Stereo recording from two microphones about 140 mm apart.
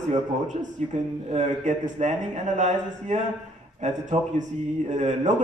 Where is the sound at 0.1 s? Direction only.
60° right (ahead or behind).